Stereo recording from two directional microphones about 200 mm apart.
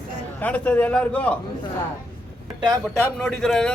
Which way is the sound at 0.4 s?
5° left (ahead or behind).